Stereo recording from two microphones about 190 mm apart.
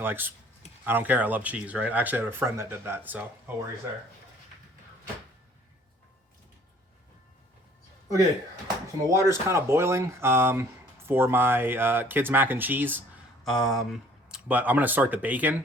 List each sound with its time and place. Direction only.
0.0 s speech: 10° right (ahead or behind)
9.0 s speech: 15° right (ahead or behind)
13.4 s speech: centre (ahead or behind)